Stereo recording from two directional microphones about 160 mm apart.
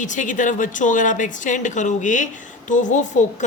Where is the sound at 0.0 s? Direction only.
50° left (ahead or behind).